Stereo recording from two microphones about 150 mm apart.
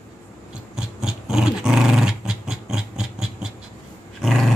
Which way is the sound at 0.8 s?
5° right (ahead or behind).